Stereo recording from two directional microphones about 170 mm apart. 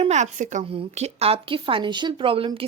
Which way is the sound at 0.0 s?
40° right (ahead or behind).